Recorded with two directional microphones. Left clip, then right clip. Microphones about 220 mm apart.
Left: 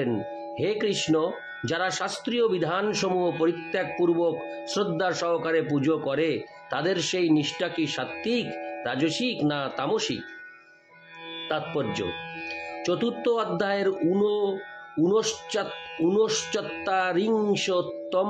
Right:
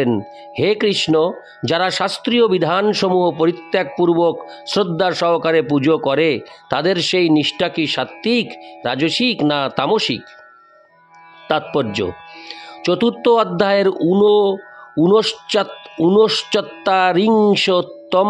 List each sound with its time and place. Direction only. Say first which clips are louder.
0.0 s speech: right 9 dB; 50° right (ahead or behind)
11.4 s speech: right 10 dB; 50° right (ahead or behind)